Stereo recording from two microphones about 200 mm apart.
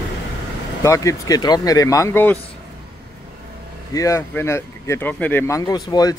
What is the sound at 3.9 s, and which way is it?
Speech, 15° left (ahead or behind).